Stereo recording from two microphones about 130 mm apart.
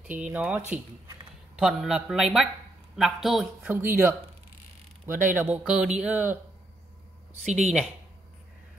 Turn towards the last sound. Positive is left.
turn(degrees=-5)  # may be behind; listen again after turning